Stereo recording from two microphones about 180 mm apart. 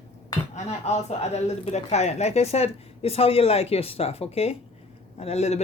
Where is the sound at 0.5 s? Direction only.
40° left (ahead or behind).